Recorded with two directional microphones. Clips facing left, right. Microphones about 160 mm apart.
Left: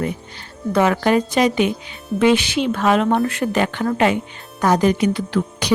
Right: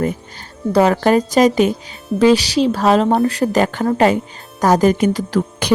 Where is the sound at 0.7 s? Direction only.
35° right (ahead or behind).